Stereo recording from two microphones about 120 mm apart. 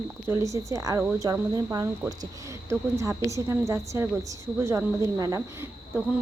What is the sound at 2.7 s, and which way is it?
A woman's voice, 25° right (ahead or behind).